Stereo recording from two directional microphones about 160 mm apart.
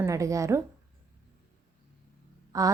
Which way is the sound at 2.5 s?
20° right (ahead or behind).